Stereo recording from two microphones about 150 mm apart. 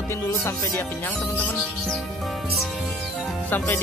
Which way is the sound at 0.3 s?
15° left (ahead or behind).